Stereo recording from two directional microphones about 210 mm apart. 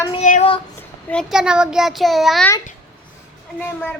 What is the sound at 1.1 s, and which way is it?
Speech, centre (ahead or behind).